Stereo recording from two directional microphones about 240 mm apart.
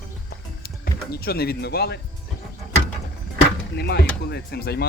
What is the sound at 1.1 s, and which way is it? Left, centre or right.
Speech, left.